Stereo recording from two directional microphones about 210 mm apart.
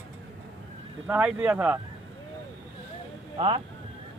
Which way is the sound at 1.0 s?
5° right (ahead or behind).